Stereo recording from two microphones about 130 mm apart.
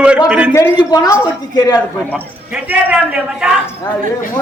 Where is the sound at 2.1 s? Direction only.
10° right (ahead or behind).